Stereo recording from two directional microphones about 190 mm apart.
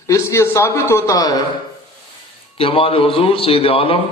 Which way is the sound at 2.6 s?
30° left (ahead or behind).